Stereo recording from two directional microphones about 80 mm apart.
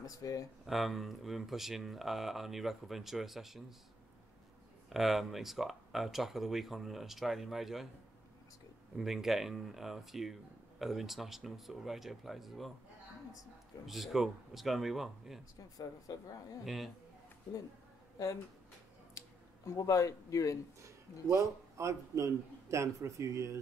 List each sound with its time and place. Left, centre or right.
0.0 s speech: left
0.7 s speech: centre
4.8 s speech: centre
8.9 s speech: centre
13.8 s speech: centre
16.1 s speech: left
16.6 s speech: centre
19.1 s a sound: left
20.8 s a man's voice: right